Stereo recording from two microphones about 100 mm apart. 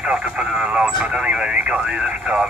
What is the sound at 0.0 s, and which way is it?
Speech, 10° right (ahead or behind).